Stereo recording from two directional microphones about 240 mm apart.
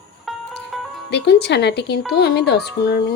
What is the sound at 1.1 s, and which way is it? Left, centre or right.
A woman's voice, left.